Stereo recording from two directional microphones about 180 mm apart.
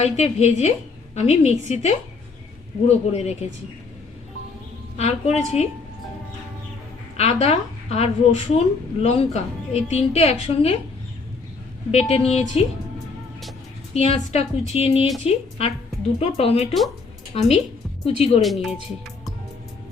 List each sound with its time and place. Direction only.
0.0 s a woman's voice: 35° left (ahead or behind)
4.9 s a woman's voice: 35° left (ahead or behind)
7.2 s a woman's voice: 35° left (ahead or behind)
11.9 s a woman's voice: 35° left (ahead or behind)
13.9 s a woman's voice: 35° left (ahead or behind)
18.0 s a woman's voice: 35° left (ahead or behind)
18.4 s speech: centre (ahead or behind)